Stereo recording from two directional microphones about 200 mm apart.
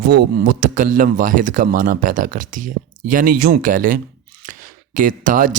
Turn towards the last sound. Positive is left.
turn(degrees=-40)  # may be behind; listen again after turning